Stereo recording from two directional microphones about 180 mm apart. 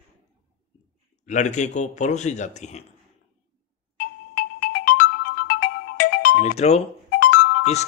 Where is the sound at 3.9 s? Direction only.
55° left (ahead or behind).